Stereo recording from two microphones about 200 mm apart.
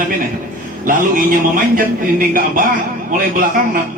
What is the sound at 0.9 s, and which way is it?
A man's voice, 45° right (ahead or behind).